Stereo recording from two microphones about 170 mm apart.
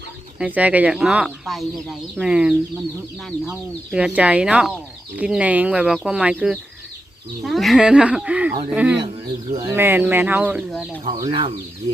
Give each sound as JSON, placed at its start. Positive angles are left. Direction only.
{"t": 0.3, "sound": "speech", "side_deg": -10}
{"t": 11.0, "sound": "speech", "side_deg": -30}